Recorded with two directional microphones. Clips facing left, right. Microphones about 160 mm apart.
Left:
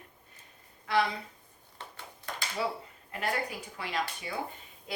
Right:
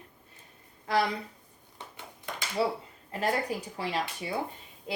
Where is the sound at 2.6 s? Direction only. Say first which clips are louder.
Right 5 dB; 35° right (ahead or behind).